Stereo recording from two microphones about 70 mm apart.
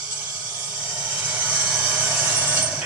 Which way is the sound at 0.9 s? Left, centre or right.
Right.